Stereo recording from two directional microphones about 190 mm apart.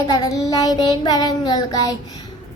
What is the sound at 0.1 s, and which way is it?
Child singing, 20° left (ahead or behind).